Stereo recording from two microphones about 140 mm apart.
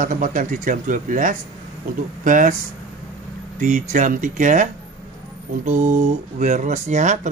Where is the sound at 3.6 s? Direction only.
65° right (ahead or behind).